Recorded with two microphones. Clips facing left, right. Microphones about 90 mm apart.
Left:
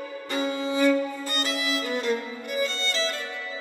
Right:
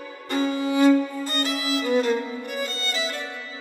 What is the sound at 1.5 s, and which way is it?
Violin, 25° right (ahead or behind).